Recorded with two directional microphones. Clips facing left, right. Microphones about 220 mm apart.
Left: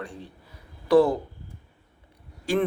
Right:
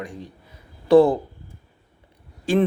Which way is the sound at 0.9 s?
30° right (ahead or behind).